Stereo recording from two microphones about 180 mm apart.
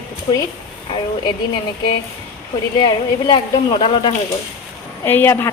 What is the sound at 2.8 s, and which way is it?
Speech, 25° left (ahead or behind).